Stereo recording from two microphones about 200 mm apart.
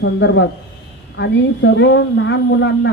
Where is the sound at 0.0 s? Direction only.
60° left (ahead or behind).